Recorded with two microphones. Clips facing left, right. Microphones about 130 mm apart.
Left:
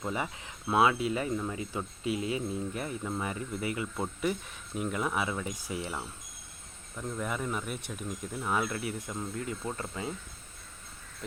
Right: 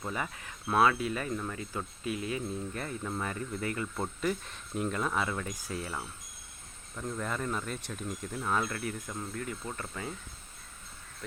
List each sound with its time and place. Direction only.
0.0 s speech: 20° left (ahead or behind)